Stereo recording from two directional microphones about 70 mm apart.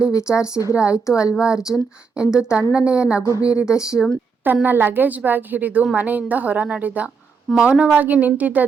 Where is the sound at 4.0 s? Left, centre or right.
Centre.